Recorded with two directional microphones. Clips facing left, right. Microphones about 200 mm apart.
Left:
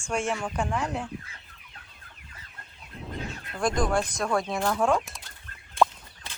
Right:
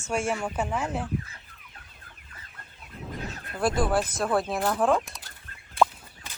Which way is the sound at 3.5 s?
5° right (ahead or behind).